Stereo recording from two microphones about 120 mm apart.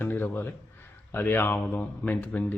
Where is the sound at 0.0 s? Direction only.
15° left (ahead or behind).